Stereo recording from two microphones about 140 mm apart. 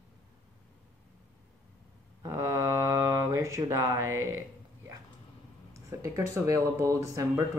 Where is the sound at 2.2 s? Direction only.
20° right (ahead or behind).